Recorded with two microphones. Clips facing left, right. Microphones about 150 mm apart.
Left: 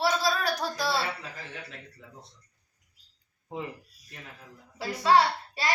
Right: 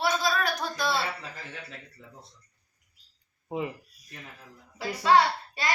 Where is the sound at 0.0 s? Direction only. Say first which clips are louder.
Even; 35° left (ahead or behind).